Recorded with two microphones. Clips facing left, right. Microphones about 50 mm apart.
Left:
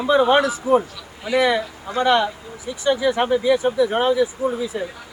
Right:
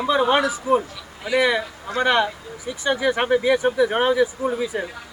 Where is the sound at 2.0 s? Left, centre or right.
Right.